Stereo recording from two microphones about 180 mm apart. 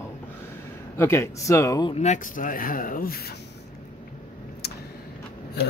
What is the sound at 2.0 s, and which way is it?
Speech, 45° left (ahead or behind).